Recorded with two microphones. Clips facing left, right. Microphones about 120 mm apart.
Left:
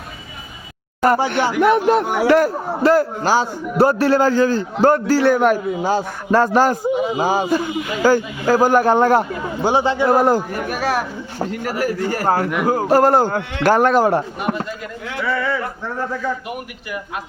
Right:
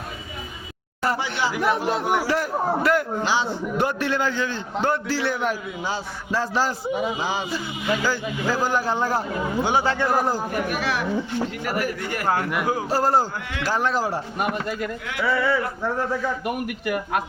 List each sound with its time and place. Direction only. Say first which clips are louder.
1.0 s a man's voice: left 8 dB; 55° left (ahead or behind)
2.8 s a man's voice: left 6 dB; 35° left (ahead or behind); by 9.2 s 60° left (ahead or behind)
9.8 s a man's voice: left 5 dB; 15° left (ahead or behind)
10.1 s a man's voice: left 8 dB; 60° left (ahead or behind)
10.5 s a man's voice: left 4 dB; 40° left (ahead or behind)
12.6 s a man's voice: left 11 dB; 45° left (ahead or behind)
15.2 s speech: left 1 dB; 5° right (ahead or behind)
16.8 s a man's voice: right 6 dB; 50° right (ahead or behind)